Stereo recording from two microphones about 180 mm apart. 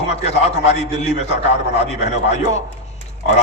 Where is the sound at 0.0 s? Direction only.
35° left (ahead or behind).